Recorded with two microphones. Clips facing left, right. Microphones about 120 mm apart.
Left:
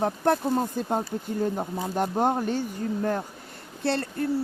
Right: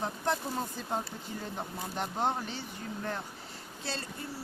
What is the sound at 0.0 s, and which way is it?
Speech, 55° left (ahead or behind).